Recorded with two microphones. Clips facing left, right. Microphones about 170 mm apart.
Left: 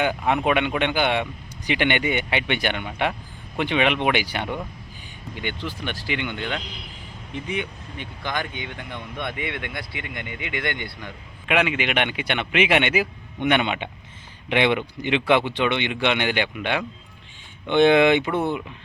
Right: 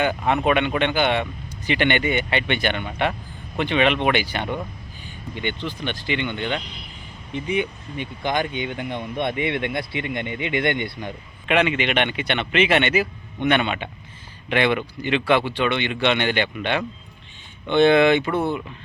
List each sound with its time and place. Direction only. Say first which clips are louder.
0.0 s speech: right 1 dB; 10° left (ahead or behind)
7.9 s speech: right 5 dB; 20° right (ahead or behind)
11.4 s speech: right 2 dB; 5° left (ahead or behind)